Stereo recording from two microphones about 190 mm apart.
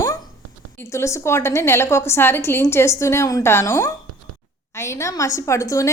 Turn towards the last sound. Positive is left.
turn(degrees=15)  # may be behind; listen again after turning